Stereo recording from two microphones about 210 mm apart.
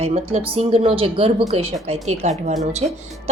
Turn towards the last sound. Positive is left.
turn(degrees=-30)  # may be behind; listen again after turning